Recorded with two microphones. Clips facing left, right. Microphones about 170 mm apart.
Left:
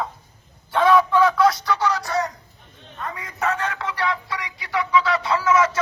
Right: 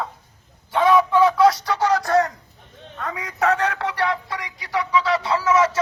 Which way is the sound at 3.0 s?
85° right.